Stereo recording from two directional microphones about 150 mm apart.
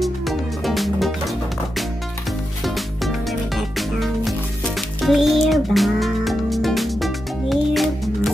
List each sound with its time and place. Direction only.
0.0 s music: centre (ahead or behind)
2.6 s music: centre (ahead or behind)